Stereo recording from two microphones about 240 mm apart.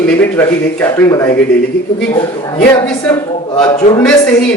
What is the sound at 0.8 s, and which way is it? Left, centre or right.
Speech, centre.